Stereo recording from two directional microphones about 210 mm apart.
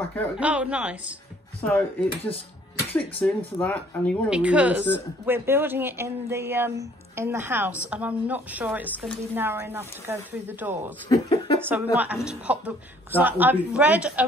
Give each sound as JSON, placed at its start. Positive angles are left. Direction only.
{"t": 0.4, "sound": "speech", "side_deg": -5}
{"t": 1.6, "sound": "speech", "side_deg": 5}
{"t": 4.3, "sound": "speech", "side_deg": -5}
{"t": 11.1, "sound": "speech", "side_deg": 20}
{"t": 11.7, "sound": "speech", "side_deg": -5}